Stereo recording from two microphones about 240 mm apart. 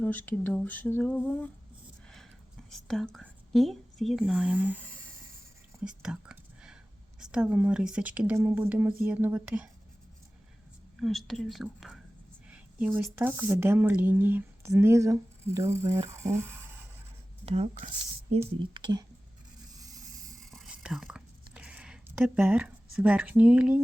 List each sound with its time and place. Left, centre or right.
0.0 s speech: centre
2.6 s speech: centre
5.8 s whispering: centre
7.2 s speech: centre
11.0 s speech: centre
17.4 s speech: right
19.7 s a sound: centre
20.4 s whispering: centre